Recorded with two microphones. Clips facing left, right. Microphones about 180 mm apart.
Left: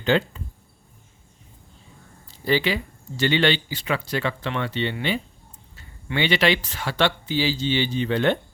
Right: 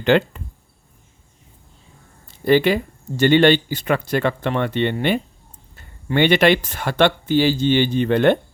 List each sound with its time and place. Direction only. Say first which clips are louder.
0.0 s a sound: right 5 dB; 65° right (ahead or behind)
2.2 s speech: right 7 dB; 60° right (ahead or behind)
6.1 s speech: right 6 dB; 50° right (ahead or behind)